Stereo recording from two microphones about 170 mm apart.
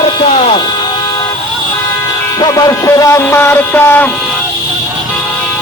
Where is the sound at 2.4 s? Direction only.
20° left (ahead or behind).